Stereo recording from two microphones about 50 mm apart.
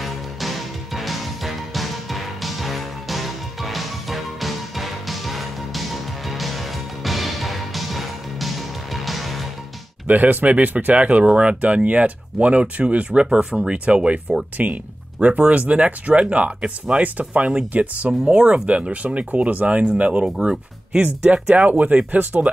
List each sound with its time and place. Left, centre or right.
0.0 s music: centre
10.0 s speech: right